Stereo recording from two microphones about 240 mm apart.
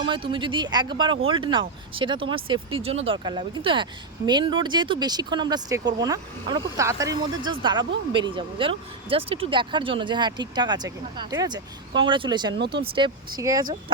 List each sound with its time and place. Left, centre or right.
0.0 s speech: right
12.5 s speech: right
12.8 s speech: right